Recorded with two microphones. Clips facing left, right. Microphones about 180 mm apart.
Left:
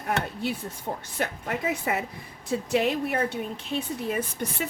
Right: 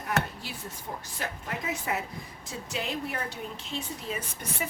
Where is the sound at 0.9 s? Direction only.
70° left (ahead or behind).